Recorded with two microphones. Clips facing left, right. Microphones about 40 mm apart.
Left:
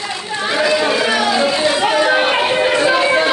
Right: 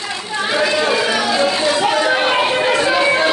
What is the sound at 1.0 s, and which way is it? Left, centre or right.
Run, centre.